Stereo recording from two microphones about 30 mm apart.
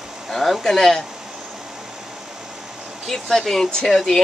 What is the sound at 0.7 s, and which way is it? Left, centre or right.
Speech, centre.